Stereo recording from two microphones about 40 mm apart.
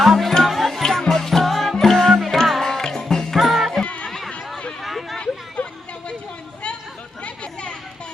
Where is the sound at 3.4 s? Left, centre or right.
Centre.